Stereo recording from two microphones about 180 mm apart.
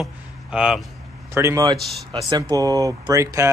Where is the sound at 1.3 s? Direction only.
15° right (ahead or behind).